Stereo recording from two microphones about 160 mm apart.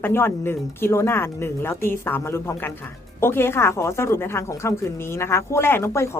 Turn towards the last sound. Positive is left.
turn(degrees=15)  # may be behind; listen again after turning